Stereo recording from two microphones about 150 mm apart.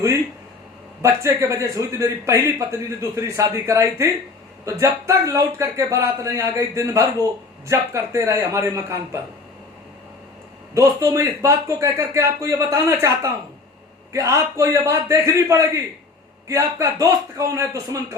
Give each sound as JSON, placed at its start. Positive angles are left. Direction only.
{"t": 1.0, "sound": "a man's voice", "side_deg": -20}
{"t": 10.8, "sound": "a man's voice", "side_deg": -20}